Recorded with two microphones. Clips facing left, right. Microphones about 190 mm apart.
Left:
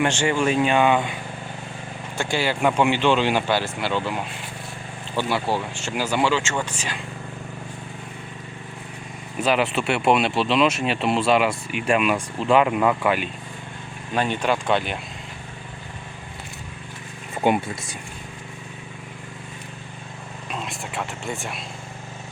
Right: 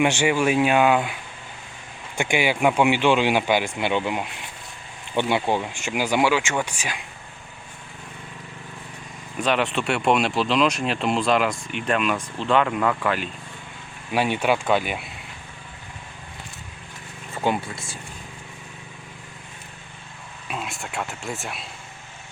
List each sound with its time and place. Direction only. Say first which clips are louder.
0.0 s speech: right 1 dB; 10° right (ahead or behind)
2.1 s speech: right 2 dB; 15° right (ahead or behind)
9.4 s speech: left 1 dB; 5° left (ahead or behind)
14.1 s speech: right 1 dB; 10° right (ahead or behind)
17.3 s speech: left 3 dB; 15° left (ahead or behind)
20.5 s speech: even; 5° right (ahead or behind)